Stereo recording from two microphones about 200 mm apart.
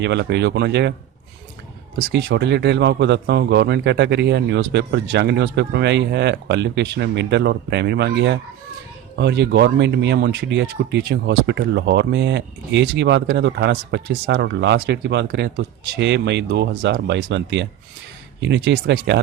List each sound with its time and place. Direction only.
0.0 s speech: 60° right (ahead or behind)
2.0 s speech: 55° right (ahead or behind)